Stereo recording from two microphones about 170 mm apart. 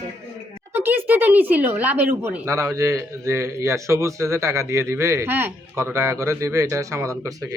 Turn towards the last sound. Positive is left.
turn(degrees=-20)  # may be behind; listen again after turning